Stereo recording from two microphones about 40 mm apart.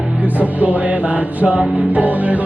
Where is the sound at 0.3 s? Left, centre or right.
Right.